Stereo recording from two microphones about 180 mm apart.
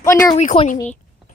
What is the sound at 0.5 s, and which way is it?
Speech, 35° left (ahead or behind).